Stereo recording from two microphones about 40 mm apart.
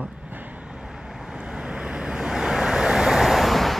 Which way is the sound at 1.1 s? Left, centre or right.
Centre.